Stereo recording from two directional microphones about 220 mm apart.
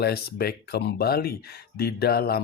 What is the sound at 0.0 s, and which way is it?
Speech, 45° left (ahead or behind).